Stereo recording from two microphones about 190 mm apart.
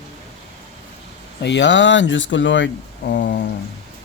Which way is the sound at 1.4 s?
70° left (ahead or behind).